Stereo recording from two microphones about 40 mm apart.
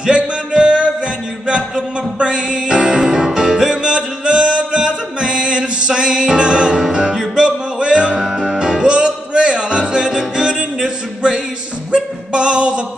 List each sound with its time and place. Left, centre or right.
0.0 s music: right
2.1 s music: right
11.9 s a sound: right